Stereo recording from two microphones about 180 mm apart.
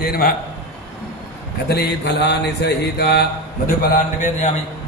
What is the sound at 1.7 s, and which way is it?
Speech, 65° left (ahead or behind).